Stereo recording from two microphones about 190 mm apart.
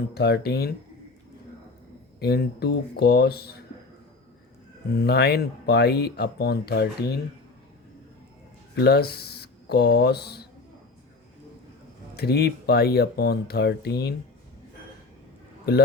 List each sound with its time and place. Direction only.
0.1 s speech: 60° left (ahead or behind)
2.1 s speech: 55° left (ahead or behind)
5.0 s speech: 60° left (ahead or behind)
8.7 s speech: 60° left (ahead or behind)
12.1 s speech: 55° left (ahead or behind)
15.7 s speech: 60° left (ahead or behind)